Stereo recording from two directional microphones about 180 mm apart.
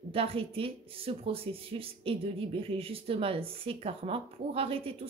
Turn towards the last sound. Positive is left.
turn(degrees=-30)  # may be behind; listen again after turning